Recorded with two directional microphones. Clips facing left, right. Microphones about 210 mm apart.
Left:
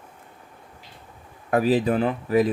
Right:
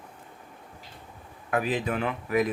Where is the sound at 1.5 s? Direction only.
35° left (ahead or behind).